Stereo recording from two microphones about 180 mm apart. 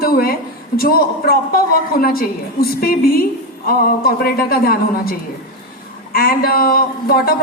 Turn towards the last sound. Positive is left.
turn(degrees=55)  # may be behind; listen again after turning